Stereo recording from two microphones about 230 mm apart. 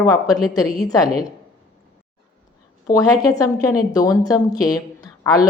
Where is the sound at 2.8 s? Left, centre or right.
Centre.